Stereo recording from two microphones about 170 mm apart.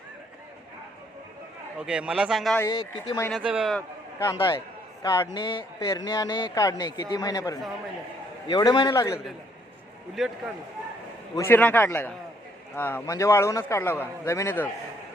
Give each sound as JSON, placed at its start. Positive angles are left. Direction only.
{"t": 1.8, "sound": "speech", "side_deg": -5}
{"t": 2.6, "sound": "speech", "side_deg": 25}
{"t": 3.3, "sound": "speech", "side_deg": -5}
{"t": 3.8, "sound": "a sound", "side_deg": 15}
{"t": 4.4, "sound": "speech", "side_deg": 30}
{"t": 5.0, "sound": "speech", "side_deg": 20}
{"t": 10.2, "sound": "speech", "side_deg": 0}
{"t": 11.3, "sound": "a man's voice", "side_deg": 15}